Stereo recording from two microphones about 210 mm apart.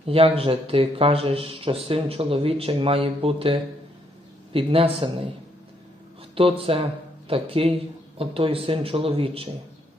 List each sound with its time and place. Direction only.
0.0 s speech: 25° right (ahead or behind)
6.3 s speech: 25° right (ahead or behind)